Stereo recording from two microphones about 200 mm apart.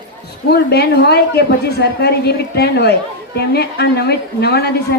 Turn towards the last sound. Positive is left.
turn(degrees=55)  # may be behind; listen again after turning